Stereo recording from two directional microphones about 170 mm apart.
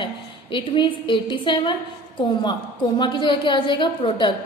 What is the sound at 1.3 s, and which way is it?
A woman's voice, 30° left (ahead or behind).